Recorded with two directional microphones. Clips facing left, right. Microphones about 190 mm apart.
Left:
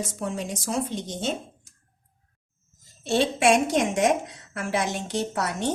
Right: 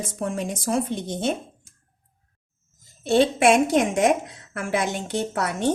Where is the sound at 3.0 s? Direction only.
55° right (ahead or behind).